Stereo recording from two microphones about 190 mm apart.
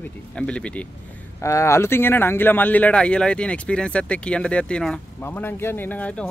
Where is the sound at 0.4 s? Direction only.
5° left (ahead or behind).